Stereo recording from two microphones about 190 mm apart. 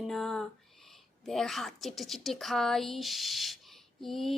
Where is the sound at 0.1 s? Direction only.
Centre (ahead or behind).